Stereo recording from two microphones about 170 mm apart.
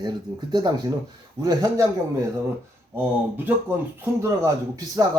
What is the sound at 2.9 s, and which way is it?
A man's voice, 10° right (ahead or behind).